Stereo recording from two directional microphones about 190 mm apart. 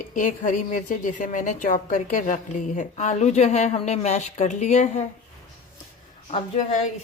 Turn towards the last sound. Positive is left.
turn(degrees=35)  # may be behind; listen again after turning